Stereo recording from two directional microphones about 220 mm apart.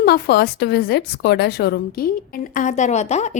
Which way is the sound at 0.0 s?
45° left (ahead or behind).